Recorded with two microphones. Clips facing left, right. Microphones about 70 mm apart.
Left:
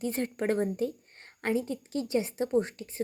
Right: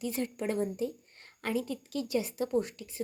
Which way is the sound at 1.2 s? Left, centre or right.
Left.